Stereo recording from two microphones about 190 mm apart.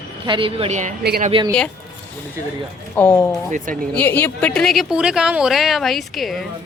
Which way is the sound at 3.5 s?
45° right (ahead or behind).